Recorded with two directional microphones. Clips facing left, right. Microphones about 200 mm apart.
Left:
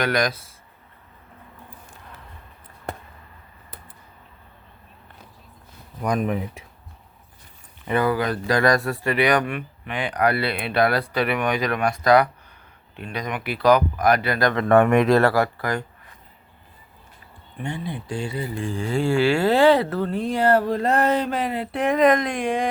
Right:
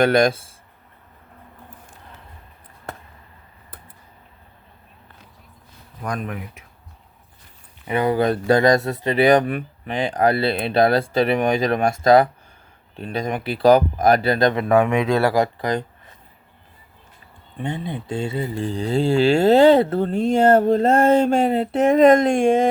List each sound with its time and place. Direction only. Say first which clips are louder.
0.0 s speech: right 7 dB; 25° right (ahead or behind)
6.1 s speech: left 6 dB; 20° left (ahead or behind)
7.9 s speech: right 3 dB; 20° right (ahead or behind)
14.7 s speech: left 6 dB; centre (ahead or behind)
15.2 s speech: right 1 dB; 15° right (ahead or behind)
17.6 s speech: right 3 dB; 20° right (ahead or behind)
18.6 s speech: right 3 dB; 35° right (ahead or behind)
19.8 s speech: right 4 dB; 25° right (ahead or behind)